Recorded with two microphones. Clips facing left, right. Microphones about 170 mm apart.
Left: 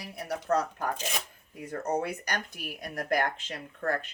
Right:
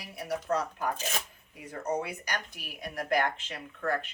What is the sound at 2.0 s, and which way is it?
A woman's voice, 45° left (ahead or behind).